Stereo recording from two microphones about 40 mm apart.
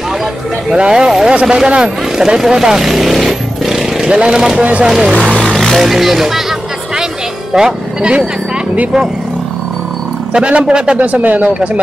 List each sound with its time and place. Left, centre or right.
0.7 s speech: right
2.5 s vehicle: centre
4.1 s speech: right
5.1 s vehicle: right
5.4 s vehicle: centre
5.8 s speech: centre
7.5 s speech: centre
10.3 s speech: right
11.0 s speech: right